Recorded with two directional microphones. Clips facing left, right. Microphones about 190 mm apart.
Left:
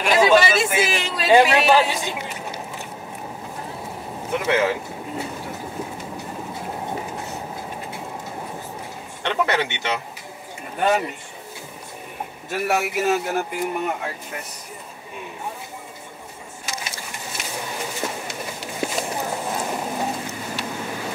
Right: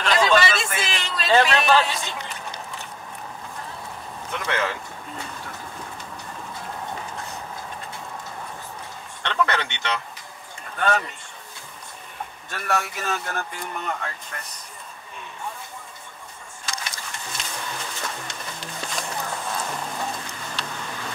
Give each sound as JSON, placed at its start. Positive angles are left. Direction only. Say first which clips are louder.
{"t": 0.0, "sound": "speech", "louder": "left 4 dB", "side_deg": 10}
{"t": 4.3, "sound": "a sound", "louder": "left 7 dB", "side_deg": 10}
{"t": 6.6, "sound": "music", "louder": "left 4 dB", "side_deg": 20}
{"t": 9.2, "sound": "speech", "louder": "left 3 dB", "side_deg": 10}
{"t": 12.4, "sound": "speech", "louder": "left 4 dB", "side_deg": 10}
{"t": 16.8, "sound": "pigeon", "louder": "left 2 dB", "side_deg": 10}
{"t": 19.2, "sound": "clip-clop", "louder": "left 4 dB", "side_deg": 20}